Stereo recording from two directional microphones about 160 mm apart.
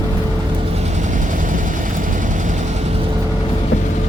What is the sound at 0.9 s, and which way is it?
Vehicle, 50° right (ahead or behind).